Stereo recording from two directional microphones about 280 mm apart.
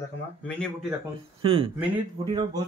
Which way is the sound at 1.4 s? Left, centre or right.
Centre.